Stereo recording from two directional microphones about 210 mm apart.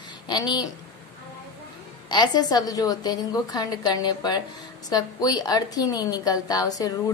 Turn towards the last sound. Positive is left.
turn(degrees=15)  # may be behind; listen again after turning